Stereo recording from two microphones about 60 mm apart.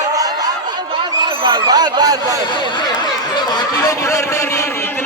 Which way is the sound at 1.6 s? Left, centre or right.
Right.